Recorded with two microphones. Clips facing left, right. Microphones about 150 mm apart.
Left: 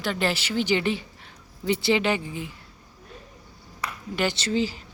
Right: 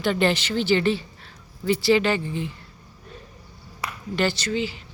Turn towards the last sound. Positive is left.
turn(degrees=40)  # may be behind; listen again after turning